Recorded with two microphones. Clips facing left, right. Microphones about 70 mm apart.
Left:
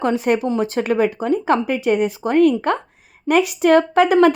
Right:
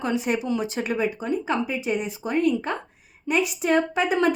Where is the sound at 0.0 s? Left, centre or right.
Left.